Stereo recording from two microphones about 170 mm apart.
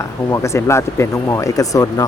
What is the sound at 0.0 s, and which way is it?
Speech, 15° left (ahead or behind).